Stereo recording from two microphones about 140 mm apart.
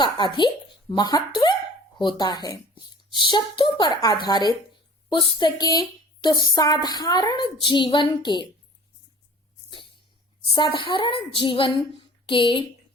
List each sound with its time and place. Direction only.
0.0 s speech: 35° left (ahead or behind)
10.4 s speech: 35° left (ahead or behind)